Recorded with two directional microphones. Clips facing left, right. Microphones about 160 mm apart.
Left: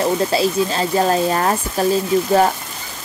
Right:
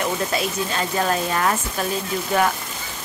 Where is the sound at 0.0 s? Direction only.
30° left (ahead or behind).